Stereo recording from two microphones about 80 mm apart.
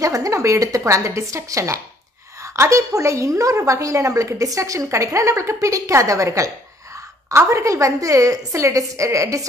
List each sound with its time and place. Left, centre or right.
0.0 s a woman's voice: right